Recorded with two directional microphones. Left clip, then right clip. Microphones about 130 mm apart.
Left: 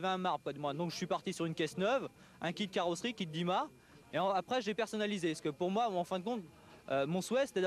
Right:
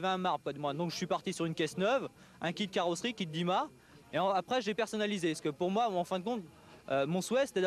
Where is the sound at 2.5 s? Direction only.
30° right (ahead or behind).